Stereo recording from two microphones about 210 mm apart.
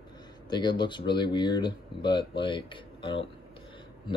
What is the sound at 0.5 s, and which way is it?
Speech, 20° left (ahead or behind).